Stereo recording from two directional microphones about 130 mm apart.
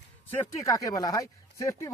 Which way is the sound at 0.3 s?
25° left (ahead or behind).